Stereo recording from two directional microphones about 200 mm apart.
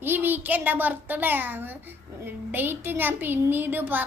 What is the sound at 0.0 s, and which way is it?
A child's voice, 10° right (ahead or behind).